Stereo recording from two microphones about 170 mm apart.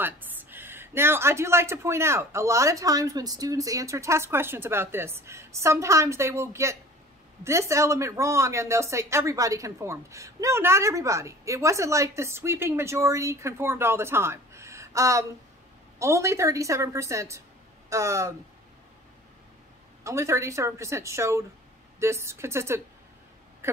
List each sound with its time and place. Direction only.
0.0 s speech: 10° right (ahead or behind)
20.0 s speech: 15° right (ahead or behind)
23.6 s a sound: 15° right (ahead or behind)